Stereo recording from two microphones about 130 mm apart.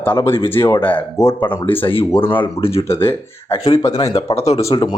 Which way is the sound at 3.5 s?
25° left (ahead or behind).